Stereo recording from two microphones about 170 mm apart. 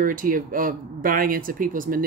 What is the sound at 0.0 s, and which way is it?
Speech, 55° right (ahead or behind).